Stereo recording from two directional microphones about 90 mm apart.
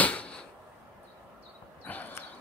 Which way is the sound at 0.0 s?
15° left (ahead or behind).